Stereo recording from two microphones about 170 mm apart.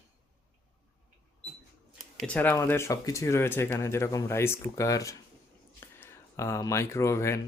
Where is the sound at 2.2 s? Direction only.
10° left (ahead or behind).